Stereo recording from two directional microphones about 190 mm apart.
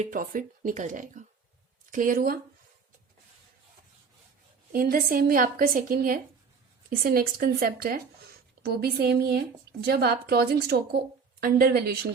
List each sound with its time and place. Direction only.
0.0 s speech: 45° right (ahead or behind)
4.7 s a woman's voice: 50° right (ahead or behind)